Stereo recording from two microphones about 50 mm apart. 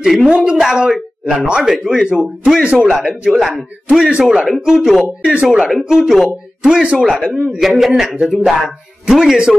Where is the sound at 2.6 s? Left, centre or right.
Right.